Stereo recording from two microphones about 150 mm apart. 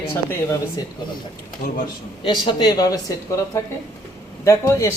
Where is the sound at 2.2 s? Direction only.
35° left (ahead or behind).